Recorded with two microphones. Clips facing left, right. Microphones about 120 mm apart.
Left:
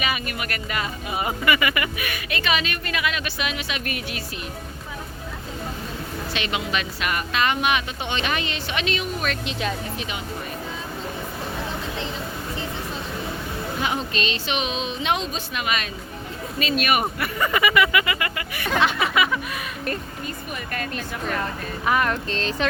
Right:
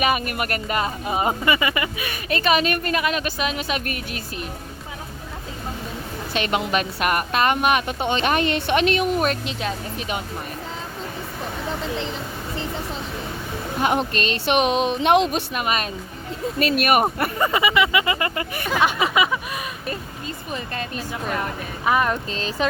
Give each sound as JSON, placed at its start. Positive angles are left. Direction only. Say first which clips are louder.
{"t": 0.0, "sound": "speech", "louder": "right 6 dB", "side_deg": -50}
{"t": 6.3, "sound": "a woman's voice", "louder": "right 5 dB", "side_deg": -45}
{"t": 13.8, "sound": "speech", "louder": "right 6 dB", "side_deg": -55}
{"t": 15.5, "sound": "speech", "louder": "right 3 dB", "side_deg": -40}
{"t": 16.6, "sound": "a woman's voice", "louder": "right 4 dB", "side_deg": -55}
{"t": 17.3, "sound": "speech", "louder": "left 2 dB", "side_deg": -25}
{"t": 18.8, "sound": "speech", "louder": "right 2 dB", "side_deg": -15}
{"t": 20.9, "sound": "speech", "louder": "right 2 dB", "side_deg": -15}